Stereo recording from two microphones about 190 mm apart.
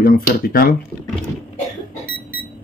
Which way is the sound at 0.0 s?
50° left (ahead or behind).